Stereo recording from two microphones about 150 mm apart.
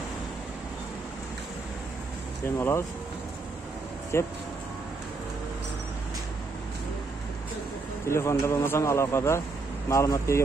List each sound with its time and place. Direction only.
2.4 s a man's voice: 15° left (ahead or behind)
4.1 s a man's voice: 15° left (ahead or behind)
8.1 s a man's voice: 20° left (ahead or behind)